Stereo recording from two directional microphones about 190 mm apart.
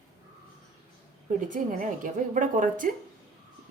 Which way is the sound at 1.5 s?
45° right (ahead or behind).